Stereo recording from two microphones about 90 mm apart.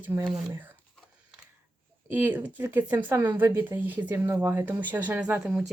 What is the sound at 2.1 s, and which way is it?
Speech, 20° right (ahead or behind).